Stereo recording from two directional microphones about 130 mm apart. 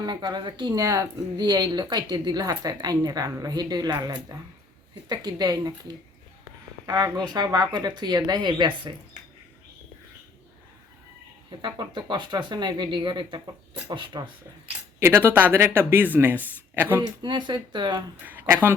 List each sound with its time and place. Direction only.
0.0 s a woman's voice: 35° right (ahead or behind)
6.8 s a woman's voice: 30° right (ahead or behind)
11.6 s a woman's voice: 35° right (ahead or behind)
14.9 s speech: 20° right (ahead or behind)
17.0 s a woman's voice: 35° right (ahead or behind)